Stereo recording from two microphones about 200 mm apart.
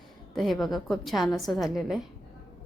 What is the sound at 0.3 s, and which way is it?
A woman's voice, centre (ahead or behind).